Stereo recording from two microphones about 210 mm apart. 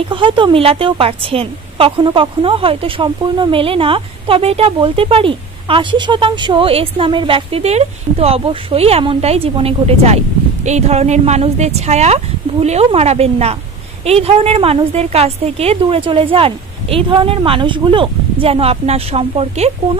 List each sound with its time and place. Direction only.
0.1 s a woman's voice: 25° right (ahead or behind)